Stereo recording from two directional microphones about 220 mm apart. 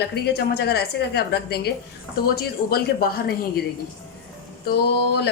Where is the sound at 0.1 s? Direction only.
45° left (ahead or behind).